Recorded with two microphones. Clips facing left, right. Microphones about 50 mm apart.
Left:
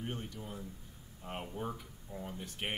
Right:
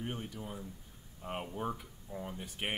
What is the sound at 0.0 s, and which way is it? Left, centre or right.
Speech, centre.